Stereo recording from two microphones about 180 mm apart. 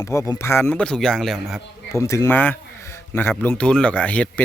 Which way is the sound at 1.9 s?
15° left (ahead or behind).